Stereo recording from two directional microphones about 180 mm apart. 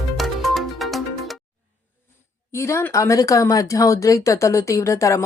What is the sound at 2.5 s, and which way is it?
Speech, 15° left (ahead or behind).